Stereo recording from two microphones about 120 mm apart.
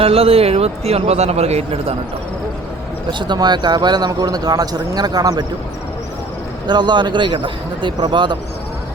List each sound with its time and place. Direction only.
0.0 s a man's voice: 55° right (ahead or behind)
3.1 s speech: 40° right (ahead or behind)
6.7 s speech: 35° right (ahead or behind)